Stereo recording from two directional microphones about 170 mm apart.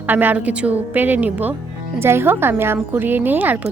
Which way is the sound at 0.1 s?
10° right (ahead or behind).